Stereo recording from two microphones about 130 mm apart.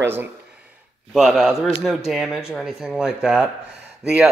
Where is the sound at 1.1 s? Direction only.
5° right (ahead or behind).